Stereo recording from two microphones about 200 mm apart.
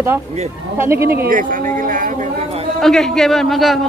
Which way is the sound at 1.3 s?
40° right (ahead or behind).